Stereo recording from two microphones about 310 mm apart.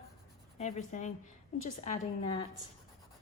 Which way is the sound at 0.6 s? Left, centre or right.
Left.